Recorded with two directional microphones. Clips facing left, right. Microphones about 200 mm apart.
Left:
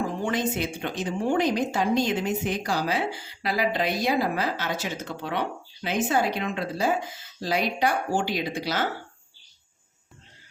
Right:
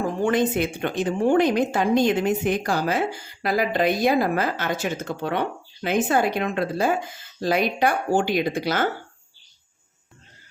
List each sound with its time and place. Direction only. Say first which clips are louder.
0.3 s a woman's voice: right 8 dB; 55° right (ahead or behind)